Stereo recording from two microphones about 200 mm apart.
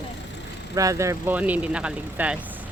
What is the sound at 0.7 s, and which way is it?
Speech, 15° right (ahead or behind).